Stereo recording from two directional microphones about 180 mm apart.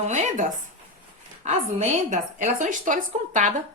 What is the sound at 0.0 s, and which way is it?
A woman's voice, 45° right (ahead or behind).